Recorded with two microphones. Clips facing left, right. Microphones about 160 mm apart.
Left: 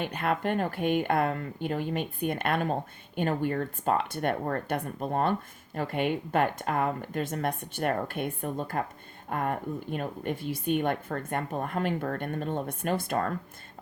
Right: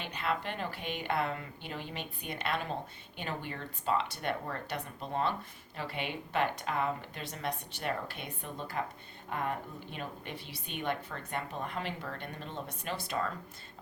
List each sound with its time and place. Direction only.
0.0 s a woman's voice: 50° left (ahead or behind)